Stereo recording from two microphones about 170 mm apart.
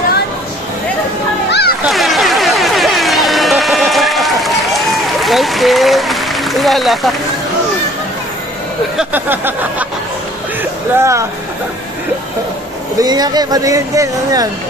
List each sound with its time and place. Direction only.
1.5 s splash: 70° left (ahead or behind)
1.9 s music: centre (ahead or behind)
8.9 s a sound: 10° right (ahead or behind)
10.6 s music: 15° right (ahead or behind)
13.0 s speech: 25° right (ahead or behind)